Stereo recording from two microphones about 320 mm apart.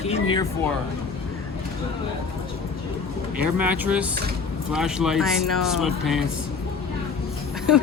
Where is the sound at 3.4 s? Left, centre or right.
Centre.